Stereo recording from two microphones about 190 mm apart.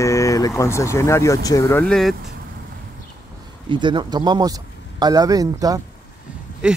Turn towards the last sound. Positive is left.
turn(degrees=-5)  # may be behind; listen again after turning